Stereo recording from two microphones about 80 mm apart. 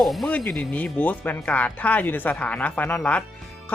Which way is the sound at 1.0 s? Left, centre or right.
Left.